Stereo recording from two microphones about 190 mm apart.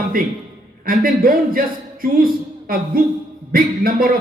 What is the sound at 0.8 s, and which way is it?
A man's voice, 50° right (ahead or behind).